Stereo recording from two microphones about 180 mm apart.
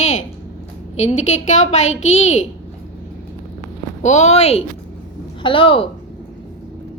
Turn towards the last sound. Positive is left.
turn(degrees=30)  # may be behind; listen again after turning